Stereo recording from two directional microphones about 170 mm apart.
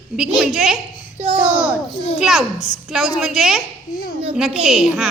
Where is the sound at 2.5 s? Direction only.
40° left (ahead or behind).